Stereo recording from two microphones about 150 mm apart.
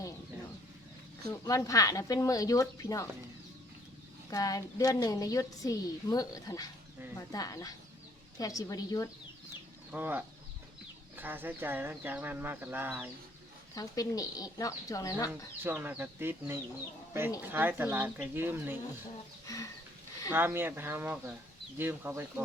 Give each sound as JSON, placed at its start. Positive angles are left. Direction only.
{"t": 1.3, "sound": "a woman's voice", "side_deg": 20}
{"t": 4.3, "sound": "a woman's voice", "side_deg": 25}
{"t": 9.9, "sound": "speech", "side_deg": -15}
{"t": 13.7, "sound": "a woman's voice", "side_deg": 25}
{"t": 15.6, "sound": "speech", "side_deg": -15}
{"t": 19.5, "sound": "speech", "side_deg": 20}
{"t": 20.3, "sound": "speech", "side_deg": -15}